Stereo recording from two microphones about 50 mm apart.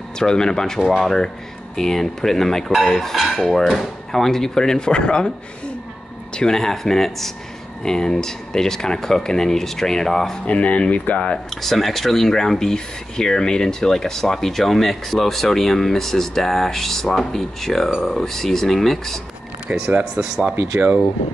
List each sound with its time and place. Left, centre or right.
0.2 s speech: centre
1.8 s speech: centre
6.3 s speech: centre
10.4 s speech: left
11.5 s speech: centre
19.7 s speech: right
20.2 s speech: centre